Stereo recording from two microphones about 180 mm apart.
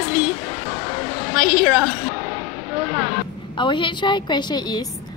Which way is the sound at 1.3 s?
15° right (ahead or behind).